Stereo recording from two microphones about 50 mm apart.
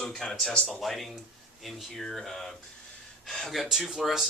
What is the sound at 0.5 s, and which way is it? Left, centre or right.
Speech, left.